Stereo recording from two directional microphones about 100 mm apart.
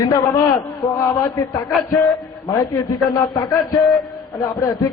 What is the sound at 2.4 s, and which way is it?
Speech, 35° left (ahead or behind).